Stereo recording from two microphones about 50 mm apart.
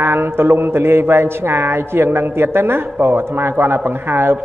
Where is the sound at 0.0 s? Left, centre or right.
Right.